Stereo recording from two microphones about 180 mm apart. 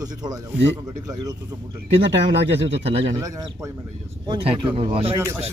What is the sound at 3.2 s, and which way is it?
Speech, 20° right (ahead or behind).